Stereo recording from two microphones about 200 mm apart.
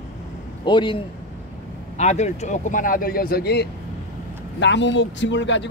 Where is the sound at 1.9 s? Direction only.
35° left (ahead or behind).